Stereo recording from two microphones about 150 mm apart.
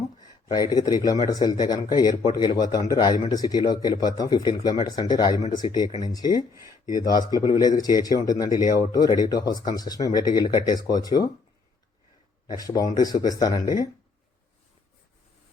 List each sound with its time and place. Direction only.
0.5 s a man's voice: 25° left (ahead or behind)
6.5 s speech: 20° right (ahead or behind)
6.9 s a man's voice: 25° left (ahead or behind)
12.5 s a man's voice: 25° left (ahead or behind)